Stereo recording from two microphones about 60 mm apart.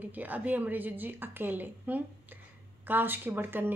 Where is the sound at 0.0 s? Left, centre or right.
Right.